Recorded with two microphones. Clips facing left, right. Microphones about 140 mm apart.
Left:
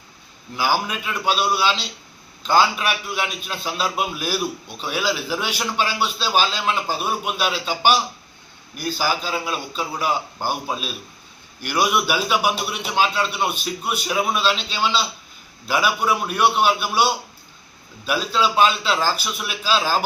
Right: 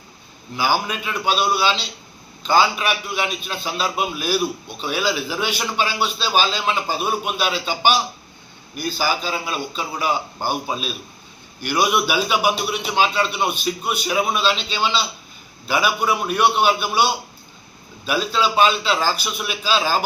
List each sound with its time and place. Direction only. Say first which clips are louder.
0.6 s a man's voice: right 1 dB; 5° left (ahead or behind)
15.7 s a man's voice: even; 5° right (ahead or behind)